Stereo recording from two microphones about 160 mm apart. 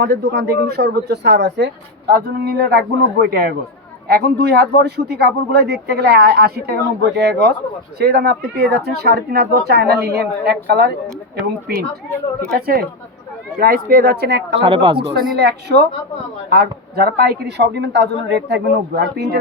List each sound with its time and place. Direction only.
0.0 s speech: 85° right
4.1 s a man's voice: 90° right
7.2 s a man's voice: 90° right
11.7 s speech: 70° right (ahead or behind)
12.0 s a woman's voice: 5° left (ahead or behind)
12.5 s speech: 70° right (ahead or behind); by 14.6 s 90° right
14.6 s speech: 30° right (ahead or behind)
15.4 s a man's voice: 90° right
16.5 s a man's voice: 70° right (ahead or behind); by 19.4 s 90° right